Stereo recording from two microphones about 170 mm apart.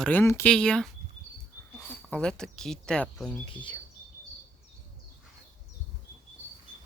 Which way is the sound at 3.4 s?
25° left (ahead or behind).